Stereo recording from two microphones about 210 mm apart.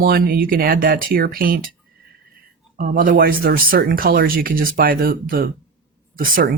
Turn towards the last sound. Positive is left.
turn(degrees=-40)  # may be behind; listen again after turning